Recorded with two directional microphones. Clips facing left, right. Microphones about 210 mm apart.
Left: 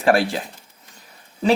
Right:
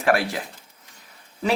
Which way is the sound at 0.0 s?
30° left (ahead or behind).